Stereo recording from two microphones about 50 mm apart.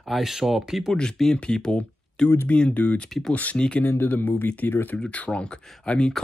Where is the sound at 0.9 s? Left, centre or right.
Centre.